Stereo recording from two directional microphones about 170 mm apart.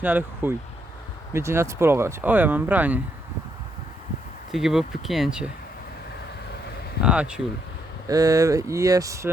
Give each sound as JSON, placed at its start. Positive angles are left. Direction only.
{"t": 0.0, "sound": "speech", "side_deg": -10}
{"t": 4.5, "sound": "speech", "side_deg": 0}
{"t": 7.0, "sound": "speech", "side_deg": -5}
{"t": 8.0, "sound": "speech", "side_deg": -20}